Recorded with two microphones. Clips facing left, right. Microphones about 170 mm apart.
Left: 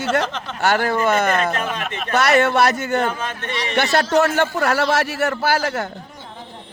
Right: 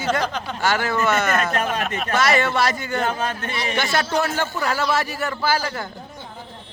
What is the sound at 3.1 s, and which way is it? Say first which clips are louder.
Speech: right 2 dB; 40° right (ahead or behind).